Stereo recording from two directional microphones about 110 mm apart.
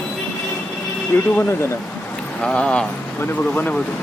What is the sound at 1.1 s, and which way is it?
Speech, 25° left (ahead or behind).